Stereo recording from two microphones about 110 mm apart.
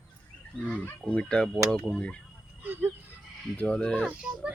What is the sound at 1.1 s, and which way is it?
Speech, 10° left (ahead or behind).